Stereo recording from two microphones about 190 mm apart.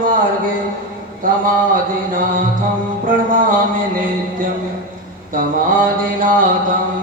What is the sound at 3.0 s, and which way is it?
Mantra, 45° right (ahead or behind).